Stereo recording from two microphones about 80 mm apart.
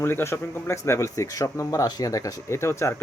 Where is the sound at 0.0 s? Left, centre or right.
Left.